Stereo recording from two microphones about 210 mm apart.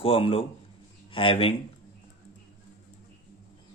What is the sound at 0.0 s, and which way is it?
Speech, 25° left (ahead or behind).